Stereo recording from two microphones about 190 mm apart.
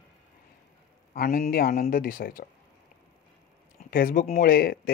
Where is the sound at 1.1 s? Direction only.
50° left (ahead or behind).